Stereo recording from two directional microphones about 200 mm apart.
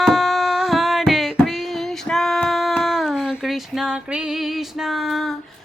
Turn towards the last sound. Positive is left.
turn(degrees=0)  # may be behind; listen again after turning